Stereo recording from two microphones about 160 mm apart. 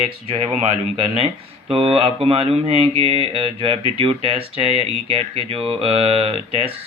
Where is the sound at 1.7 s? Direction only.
35° right (ahead or behind).